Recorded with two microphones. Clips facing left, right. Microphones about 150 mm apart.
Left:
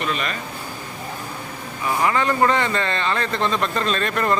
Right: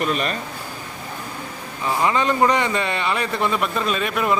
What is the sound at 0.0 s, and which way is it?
Speech, 40° right (ahead or behind).